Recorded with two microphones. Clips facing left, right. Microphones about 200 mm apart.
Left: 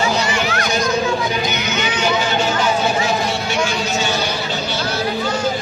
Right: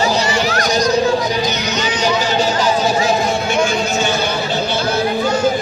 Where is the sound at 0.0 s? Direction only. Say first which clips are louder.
Right 3 dB; 35° right (ahead or behind).